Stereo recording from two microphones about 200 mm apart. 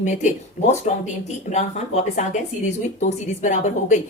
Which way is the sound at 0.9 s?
35° left (ahead or behind).